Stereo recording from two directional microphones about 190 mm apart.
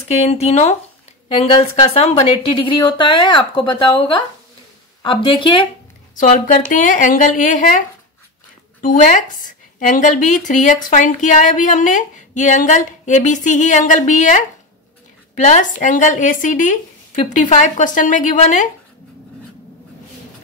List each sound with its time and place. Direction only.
0.1 s a woman's voice: 35° left (ahead or behind)
6.1 s a woman's voice: 45° left (ahead or behind)
8.8 s a woman's voice: 45° left (ahead or behind)